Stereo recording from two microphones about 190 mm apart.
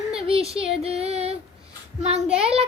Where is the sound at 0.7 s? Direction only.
30° right (ahead or behind).